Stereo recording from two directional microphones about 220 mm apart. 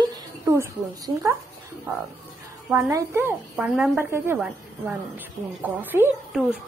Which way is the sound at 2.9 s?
10° right (ahead or behind).